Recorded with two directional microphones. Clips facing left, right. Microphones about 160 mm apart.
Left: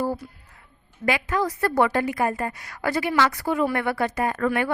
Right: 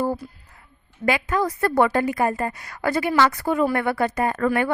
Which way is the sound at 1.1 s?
45° right (ahead or behind).